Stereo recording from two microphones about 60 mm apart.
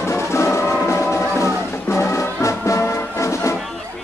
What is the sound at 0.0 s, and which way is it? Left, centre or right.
Music, left.